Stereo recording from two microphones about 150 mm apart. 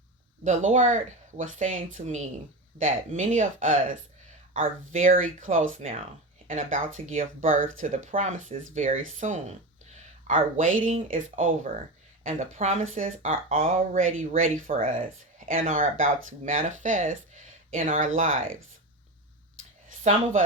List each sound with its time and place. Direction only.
0.4 s speech: 55° right (ahead or behind)